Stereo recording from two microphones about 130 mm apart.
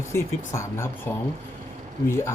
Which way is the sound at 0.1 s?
20° left (ahead or behind).